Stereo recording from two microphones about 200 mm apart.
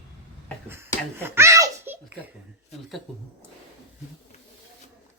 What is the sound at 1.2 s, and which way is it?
Giggle, 10° right (ahead or behind).